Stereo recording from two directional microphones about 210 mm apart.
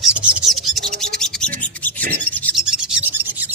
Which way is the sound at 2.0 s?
5° left (ahead or behind).